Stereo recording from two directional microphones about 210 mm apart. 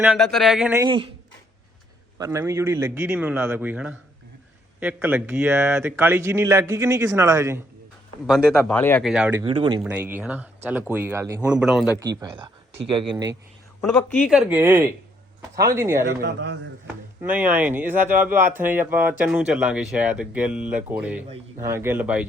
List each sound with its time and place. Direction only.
0.0 s speech: centre (ahead or behind)
0.8 s speech: 20° right (ahead or behind)
2.1 s speech: 15° right (ahead or behind)
8.3 s speech: centre (ahead or behind)
9.0 s speech: 5° right (ahead or behind)
9.4 s speech: 25° right (ahead or behind)
9.8 s speech: 10° right (ahead or behind)
11.9 s speech: 20° right (ahead or behind)
14.2 s speech: 5° right (ahead or behind)
16.2 s a man's voice: 55° right (ahead or behind)
16.8 s speech: 5° right (ahead or behind)